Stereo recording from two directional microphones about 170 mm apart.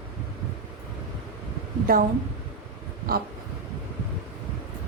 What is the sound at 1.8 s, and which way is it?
Speech, 60° right (ahead or behind).